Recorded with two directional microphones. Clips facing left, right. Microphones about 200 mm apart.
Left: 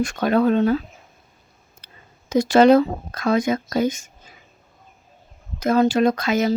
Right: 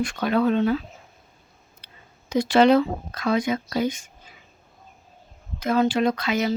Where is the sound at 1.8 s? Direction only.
45° left (ahead or behind).